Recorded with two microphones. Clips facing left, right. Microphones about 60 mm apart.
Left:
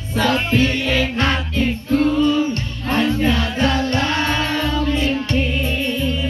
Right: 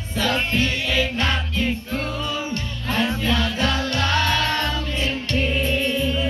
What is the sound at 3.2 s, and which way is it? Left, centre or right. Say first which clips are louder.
Music: left 4 dB; left.